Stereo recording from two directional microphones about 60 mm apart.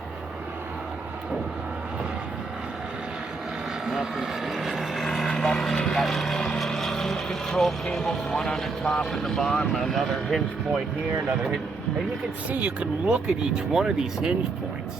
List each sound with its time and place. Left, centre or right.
3.8 s vehicle: centre
5.7 s speech: centre
12.5 s speech: right